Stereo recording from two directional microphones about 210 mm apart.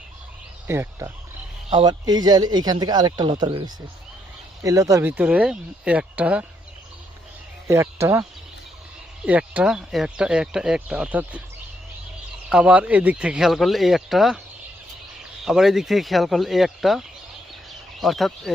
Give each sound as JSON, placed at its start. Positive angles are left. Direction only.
{"t": 0.7, "sound": "speech", "side_deg": -10}
{"t": 7.7, "sound": "speech", "side_deg": -15}
{"t": 12.5, "sound": "speech", "side_deg": -5}
{"t": 15.4, "sound": "speech", "side_deg": 0}